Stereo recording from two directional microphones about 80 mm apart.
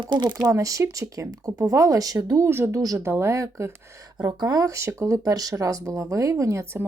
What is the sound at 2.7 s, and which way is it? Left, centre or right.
Speech, right.